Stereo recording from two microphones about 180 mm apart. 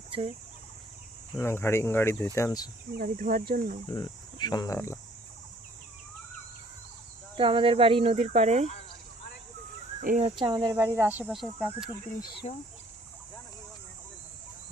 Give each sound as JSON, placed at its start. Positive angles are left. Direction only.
{"t": 1.4, "sound": "speech", "side_deg": 15}
{"t": 3.0, "sound": "speech", "side_deg": -50}
{"t": 3.9, "sound": "speech", "side_deg": 25}
{"t": 7.3, "sound": "speech", "side_deg": -30}
{"t": 10.0, "sound": "speech", "side_deg": -50}
{"t": 10.2, "sound": "speech", "side_deg": -25}
{"t": 12.4, "sound": "speech", "side_deg": 35}